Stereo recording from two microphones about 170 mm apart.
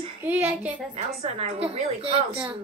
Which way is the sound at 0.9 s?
40° right (ahead or behind).